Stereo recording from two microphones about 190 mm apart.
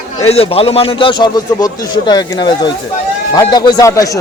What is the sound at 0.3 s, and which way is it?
A man's voice, 30° left (ahead or behind).